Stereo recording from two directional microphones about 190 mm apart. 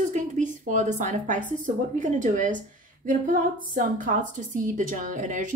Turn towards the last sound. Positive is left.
turn(degrees=-45)  # may be behind; listen again after turning